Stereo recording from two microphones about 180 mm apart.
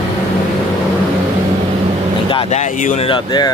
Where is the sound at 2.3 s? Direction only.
40° left (ahead or behind).